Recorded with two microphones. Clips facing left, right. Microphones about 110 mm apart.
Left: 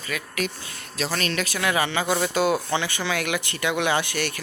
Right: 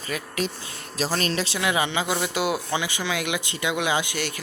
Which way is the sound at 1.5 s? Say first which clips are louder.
Left 2 dB; 20° right (ahead or behind).